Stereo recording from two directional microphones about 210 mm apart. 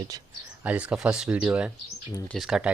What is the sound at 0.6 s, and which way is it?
Speech, 5° right (ahead or behind).